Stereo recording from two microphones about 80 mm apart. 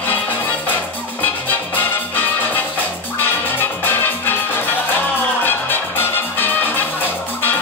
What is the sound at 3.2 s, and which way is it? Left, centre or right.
Music, left.